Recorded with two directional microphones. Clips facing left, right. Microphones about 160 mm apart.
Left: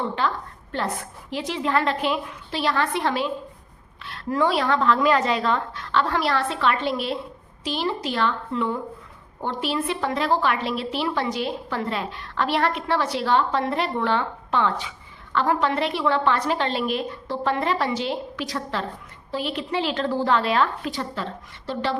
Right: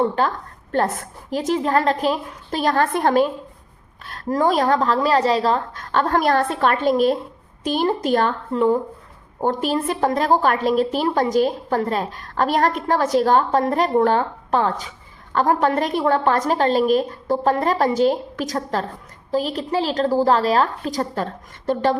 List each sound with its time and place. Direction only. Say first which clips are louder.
0.2 s a woman's voice: right 4 dB; 45° right (ahead or behind)